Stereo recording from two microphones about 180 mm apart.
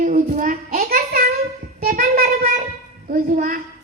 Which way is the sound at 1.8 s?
50° right (ahead or behind).